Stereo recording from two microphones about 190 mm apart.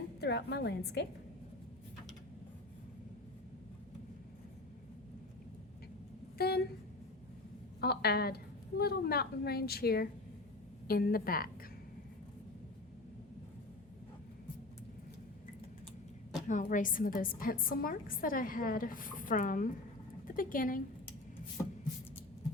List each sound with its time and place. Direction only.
0.2 s a woman's voice: 60° left (ahead or behind)
6.3 s speech: 55° left (ahead or behind)
7.8 s a woman's voice: 55° left (ahead or behind)
16.5 s a woman's voice: 40° left (ahead or behind)